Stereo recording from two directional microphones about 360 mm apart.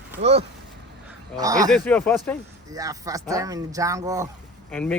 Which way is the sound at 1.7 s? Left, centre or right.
Centre.